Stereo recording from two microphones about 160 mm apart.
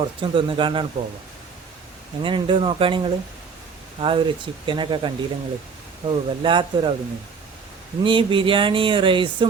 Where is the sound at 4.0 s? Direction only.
30° right (ahead or behind).